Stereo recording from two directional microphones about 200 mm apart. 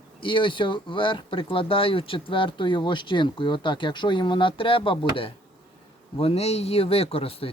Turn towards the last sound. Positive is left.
turn(degrees=30)  # may be behind; listen again after turning